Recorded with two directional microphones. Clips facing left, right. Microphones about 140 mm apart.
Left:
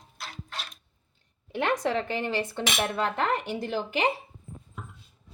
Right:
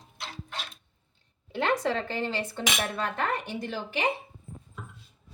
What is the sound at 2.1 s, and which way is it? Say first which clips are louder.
A woman's voice: left 2 dB; 15° left (ahead or behind).